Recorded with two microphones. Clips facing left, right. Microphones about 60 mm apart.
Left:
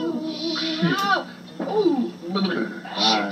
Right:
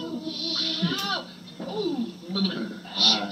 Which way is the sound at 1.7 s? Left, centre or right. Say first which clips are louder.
Left 8 dB; left.